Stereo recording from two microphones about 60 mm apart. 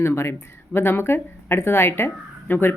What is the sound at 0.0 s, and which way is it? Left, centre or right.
Speech, left.